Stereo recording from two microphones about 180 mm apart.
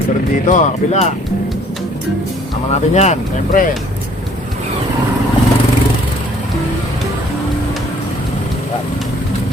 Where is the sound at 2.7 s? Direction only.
40° left (ahead or behind).